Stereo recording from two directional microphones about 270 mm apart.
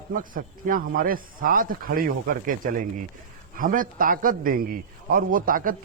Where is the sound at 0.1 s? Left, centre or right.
Right.